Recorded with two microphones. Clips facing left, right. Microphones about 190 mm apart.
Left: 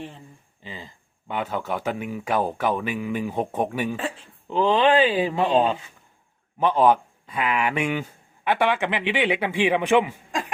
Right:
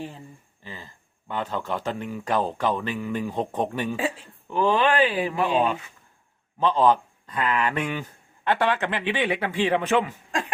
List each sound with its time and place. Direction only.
0.6 s speech: 20° left (ahead or behind)
4.4 s speech: 20° left (ahead or behind)
6.6 s speech: 15° left (ahead or behind)